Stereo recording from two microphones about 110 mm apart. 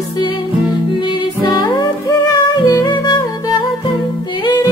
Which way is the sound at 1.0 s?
40° left (ahead or behind).